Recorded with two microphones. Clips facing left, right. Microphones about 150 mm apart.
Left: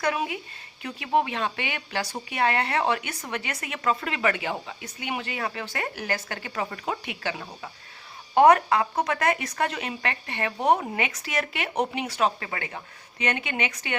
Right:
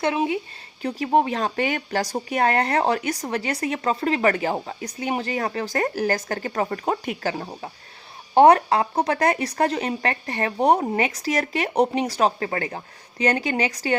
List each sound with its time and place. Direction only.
0.0 s speech: 25° right (ahead or behind)
0.8 s speech: 35° right (ahead or behind)